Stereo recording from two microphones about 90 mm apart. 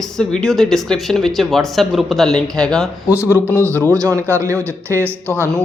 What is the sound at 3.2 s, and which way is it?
Speech, 25° left (ahead or behind).